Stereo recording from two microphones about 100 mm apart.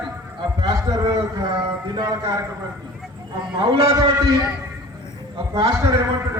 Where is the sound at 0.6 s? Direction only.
35° right (ahead or behind).